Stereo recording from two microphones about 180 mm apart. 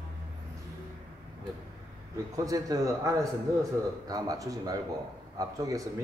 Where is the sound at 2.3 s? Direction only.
20° right (ahead or behind).